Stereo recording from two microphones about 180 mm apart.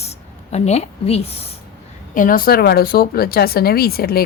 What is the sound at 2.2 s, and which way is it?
A woman's voice, 50° left (ahead or behind).